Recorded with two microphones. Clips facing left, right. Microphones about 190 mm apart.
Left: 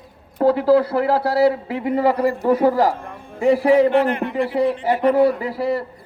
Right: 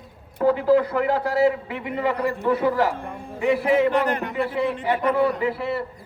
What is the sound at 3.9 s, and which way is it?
Speech, 40° right (ahead or behind).